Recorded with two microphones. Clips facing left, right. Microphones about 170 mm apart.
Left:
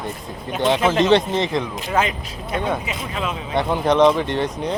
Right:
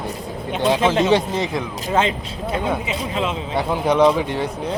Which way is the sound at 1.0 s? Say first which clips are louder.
Left 1 dB; 10° right (ahead or behind).